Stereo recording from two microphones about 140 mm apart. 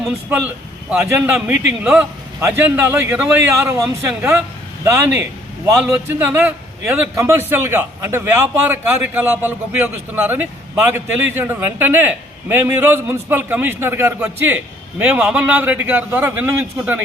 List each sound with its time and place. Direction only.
0.3 s a man's voice: 10° right (ahead or behind)